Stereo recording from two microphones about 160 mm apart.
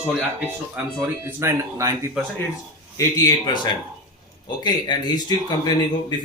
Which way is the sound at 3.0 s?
25° left (ahead or behind).